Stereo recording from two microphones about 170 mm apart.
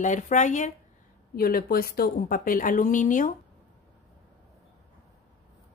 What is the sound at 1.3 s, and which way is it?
A woman's voice, 60° left (ahead or behind).